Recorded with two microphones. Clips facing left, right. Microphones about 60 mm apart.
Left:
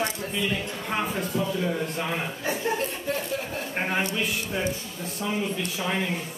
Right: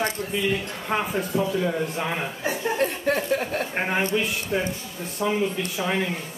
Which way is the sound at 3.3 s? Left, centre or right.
Right.